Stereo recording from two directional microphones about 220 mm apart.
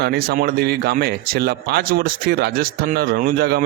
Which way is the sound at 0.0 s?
45° right (ahead or behind).